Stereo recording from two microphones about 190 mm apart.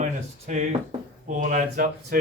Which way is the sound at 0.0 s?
40° right (ahead or behind).